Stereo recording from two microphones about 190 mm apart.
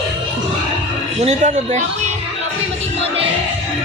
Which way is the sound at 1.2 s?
40° right (ahead or behind).